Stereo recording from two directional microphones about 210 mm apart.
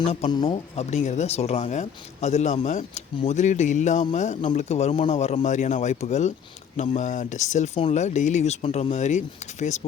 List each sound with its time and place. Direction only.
0.0 s speech: 30° left (ahead or behind)